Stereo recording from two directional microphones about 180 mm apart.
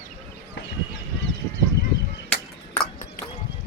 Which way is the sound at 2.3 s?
5° left (ahead or behind).